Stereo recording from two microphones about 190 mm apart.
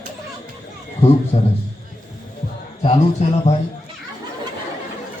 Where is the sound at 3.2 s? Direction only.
35° left (ahead or behind).